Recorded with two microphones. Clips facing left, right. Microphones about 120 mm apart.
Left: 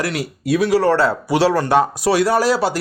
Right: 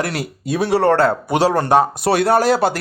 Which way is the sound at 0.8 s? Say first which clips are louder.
Right 1 dB; 55° right (ahead or behind).